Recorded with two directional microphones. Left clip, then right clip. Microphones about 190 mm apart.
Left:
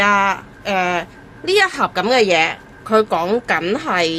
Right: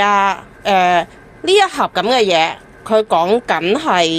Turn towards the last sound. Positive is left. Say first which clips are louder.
# right 4 dB
turn(degrees=-20)  # may be behind; listen again after turning